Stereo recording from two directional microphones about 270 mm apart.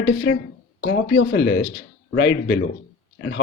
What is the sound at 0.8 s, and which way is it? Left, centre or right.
A man's voice, left.